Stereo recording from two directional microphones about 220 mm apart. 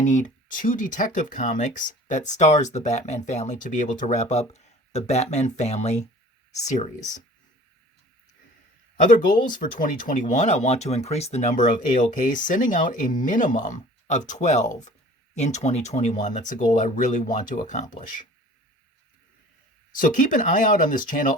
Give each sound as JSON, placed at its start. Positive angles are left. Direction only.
{"t": 0.0, "sound": "speech", "side_deg": 35}
{"t": 9.0, "sound": "speech", "side_deg": 35}
{"t": 20.0, "sound": "speech", "side_deg": 35}